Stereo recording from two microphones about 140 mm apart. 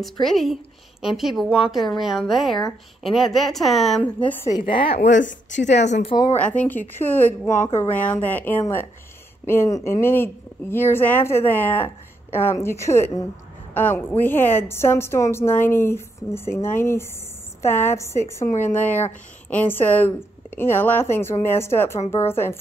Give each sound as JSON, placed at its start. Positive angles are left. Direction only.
{"t": 0.0, "sound": "speech", "side_deg": 0}
{"t": 4.5, "sound": "a woman's voice", "side_deg": 35}
{"t": 5.7, "sound": "speech", "side_deg": 55}
{"t": 6.3, "sound": "a woman's voice", "side_deg": 10}